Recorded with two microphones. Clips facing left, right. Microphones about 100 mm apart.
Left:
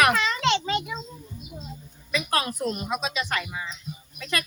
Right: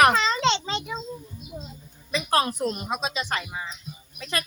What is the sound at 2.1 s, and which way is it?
Speech, 30° right (ahead or behind).